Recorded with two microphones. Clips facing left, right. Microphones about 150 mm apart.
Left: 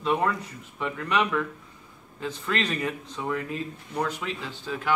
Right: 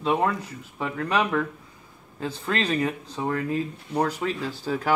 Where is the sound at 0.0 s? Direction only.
35° right (ahead or behind).